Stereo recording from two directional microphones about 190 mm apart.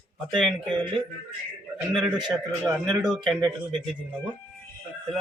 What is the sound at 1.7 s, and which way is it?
A man's voice, 5° right (ahead or behind).